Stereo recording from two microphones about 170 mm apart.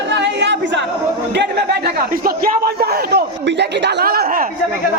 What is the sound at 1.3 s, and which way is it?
Speech, 80° right.